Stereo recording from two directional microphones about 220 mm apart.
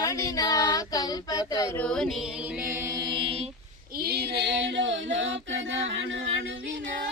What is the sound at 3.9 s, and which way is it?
Female singing, 45° right (ahead or behind).